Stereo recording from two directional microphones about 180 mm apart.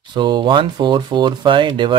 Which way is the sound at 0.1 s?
25° right (ahead or behind).